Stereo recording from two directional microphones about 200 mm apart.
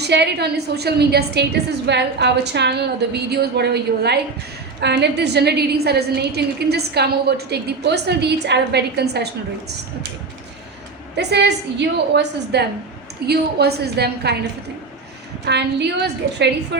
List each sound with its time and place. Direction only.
0.0 s a woman's voice: 55° right (ahead or behind)
11.2 s a woman's voice: 55° right (ahead or behind)
15.4 s a woman's voice: 55° right (ahead or behind)